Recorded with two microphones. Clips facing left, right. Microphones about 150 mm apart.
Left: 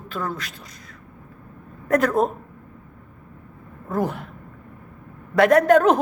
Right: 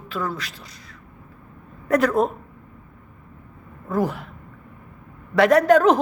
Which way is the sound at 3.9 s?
50° left (ahead or behind).